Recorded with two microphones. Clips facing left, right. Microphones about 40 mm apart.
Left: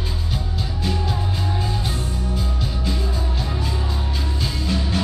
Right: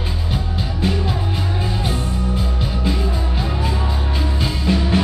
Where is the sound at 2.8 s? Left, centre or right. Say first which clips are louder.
Right 5 dB; right.